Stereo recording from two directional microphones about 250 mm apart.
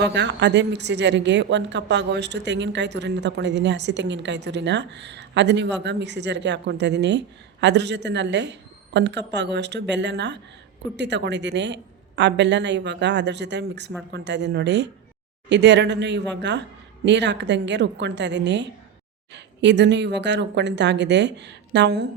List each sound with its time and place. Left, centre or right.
0.0 s a woman's voice: right